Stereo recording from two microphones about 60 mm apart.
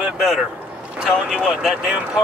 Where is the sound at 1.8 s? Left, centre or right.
Centre.